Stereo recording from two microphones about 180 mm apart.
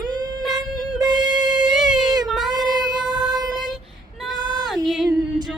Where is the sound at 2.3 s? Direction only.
Centre (ahead or behind).